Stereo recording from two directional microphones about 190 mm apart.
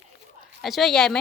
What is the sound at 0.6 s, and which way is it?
Speech, centre (ahead or behind).